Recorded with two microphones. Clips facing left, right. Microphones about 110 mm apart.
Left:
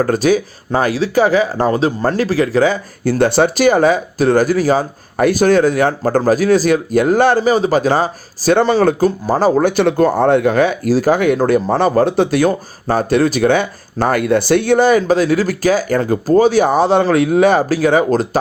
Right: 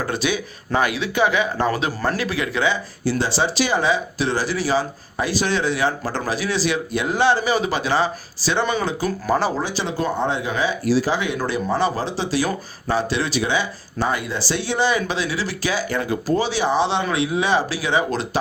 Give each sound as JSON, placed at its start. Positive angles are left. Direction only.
{"t": 0.0, "sound": "speech", "side_deg": 40}
{"t": 9.0, "sound": "speech", "side_deg": 35}
{"t": 9.6, "sound": "speech", "side_deg": 60}